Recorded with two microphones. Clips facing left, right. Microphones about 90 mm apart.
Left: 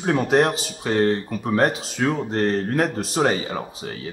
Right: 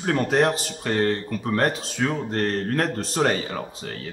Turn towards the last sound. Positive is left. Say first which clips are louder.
# left 2 dB
turn(degrees=15)  # may be behind; listen again after turning